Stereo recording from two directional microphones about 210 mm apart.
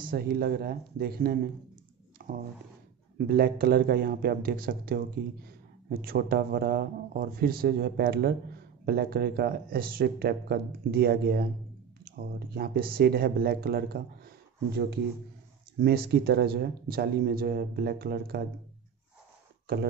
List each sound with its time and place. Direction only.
0.0 s speech: 45° right (ahead or behind)
2.2 s a sound: 45° right (ahead or behind)
3.2 s speech: 45° right (ahead or behind)
15.8 s speech: 50° right (ahead or behind)